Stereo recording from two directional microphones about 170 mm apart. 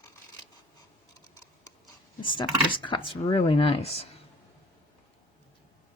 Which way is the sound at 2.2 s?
30° left (ahead or behind).